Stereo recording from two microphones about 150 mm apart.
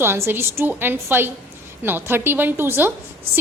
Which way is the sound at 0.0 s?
15° right (ahead or behind).